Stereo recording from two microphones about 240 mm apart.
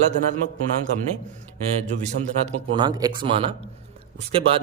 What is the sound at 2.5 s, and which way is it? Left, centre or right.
A man's voice, right.